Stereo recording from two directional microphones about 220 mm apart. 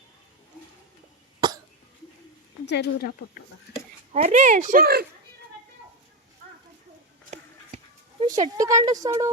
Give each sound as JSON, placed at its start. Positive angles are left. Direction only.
{"t": 1.4, "sound": "cough", "side_deg": -20}
{"t": 2.6, "sound": "speech", "side_deg": 50}
{"t": 4.1, "sound": "speech", "side_deg": -35}
{"t": 8.2, "sound": "speech", "side_deg": -15}